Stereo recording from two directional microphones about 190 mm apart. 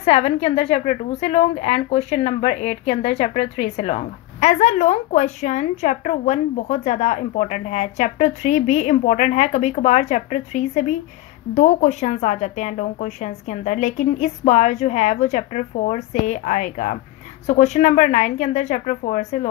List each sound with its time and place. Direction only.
0.0 s a woman's voice: 35° left (ahead or behind)